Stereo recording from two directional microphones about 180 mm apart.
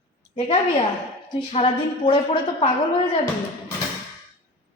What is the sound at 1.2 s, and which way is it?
A woman's voice, 30° left (ahead or behind).